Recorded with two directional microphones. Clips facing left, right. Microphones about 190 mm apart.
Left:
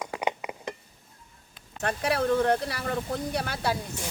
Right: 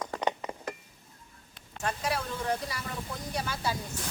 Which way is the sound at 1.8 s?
65° left (ahead or behind).